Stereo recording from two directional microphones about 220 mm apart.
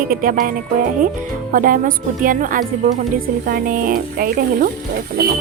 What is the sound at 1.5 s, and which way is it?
Speech, 40° right (ahead or behind).